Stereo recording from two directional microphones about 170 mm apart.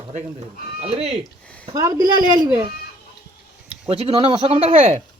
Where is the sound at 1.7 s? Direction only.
20° right (ahead or behind).